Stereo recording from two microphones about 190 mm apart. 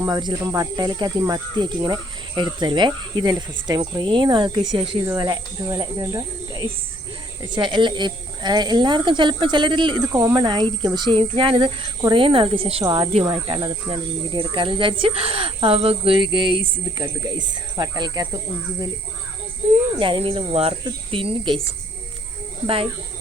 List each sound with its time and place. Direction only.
0.0 s a woman's voice: 20° right (ahead or behind)
12.8 s a woman's voice: 20° right (ahead or behind)
20.0 s a woman's voice: 30° right (ahead or behind)
22.6 s a woman's voice: 30° right (ahead or behind)